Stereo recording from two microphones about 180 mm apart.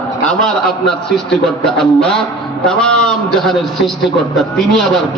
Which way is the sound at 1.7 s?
5° left (ahead or behind).